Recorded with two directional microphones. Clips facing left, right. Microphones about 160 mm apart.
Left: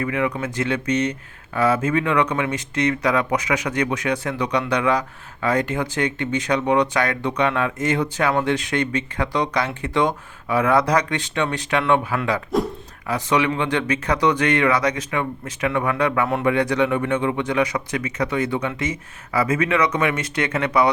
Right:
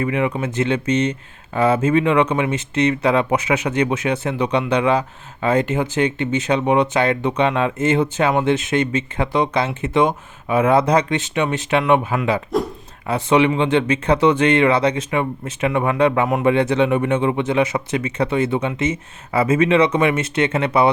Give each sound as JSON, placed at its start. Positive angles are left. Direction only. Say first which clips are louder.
{"t": 0.0, "sound": "speech", "louder": "right 3 dB", "side_deg": -25}